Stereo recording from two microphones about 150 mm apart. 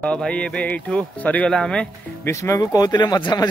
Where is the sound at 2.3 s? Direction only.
20° left (ahead or behind).